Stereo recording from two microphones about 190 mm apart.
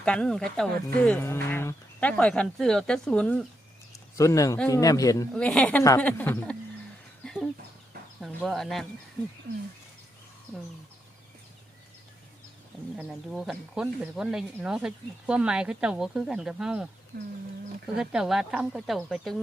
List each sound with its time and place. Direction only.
0.0 s speech: 5° left (ahead or behind)
4.2 s speech: 15° left (ahead or behind)
5.3 s speech: 5° left (ahead or behind)
7.3 s chicken: 5° left (ahead or behind)
8.2 s speech: centre (ahead or behind)
13.0 s speech: centre (ahead or behind)
17.1 s bird: 65° right (ahead or behind)
17.9 s speech: 5° right (ahead or behind)